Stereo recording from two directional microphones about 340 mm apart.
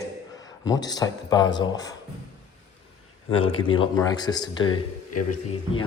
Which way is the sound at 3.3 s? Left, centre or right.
Left.